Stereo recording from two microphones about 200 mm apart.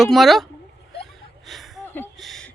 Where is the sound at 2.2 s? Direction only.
Centre (ahead or behind).